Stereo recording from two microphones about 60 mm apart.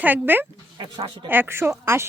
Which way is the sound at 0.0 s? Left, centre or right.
Right.